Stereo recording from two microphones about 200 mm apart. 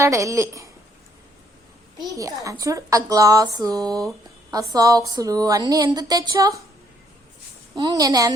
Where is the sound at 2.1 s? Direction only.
15° right (ahead or behind).